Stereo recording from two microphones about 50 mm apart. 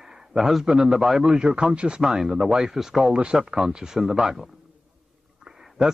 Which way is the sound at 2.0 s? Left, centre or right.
Centre.